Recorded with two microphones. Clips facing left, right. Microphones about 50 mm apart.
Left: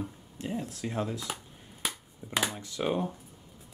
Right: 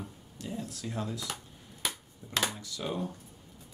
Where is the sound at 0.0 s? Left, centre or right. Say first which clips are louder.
Left 5 dB; left.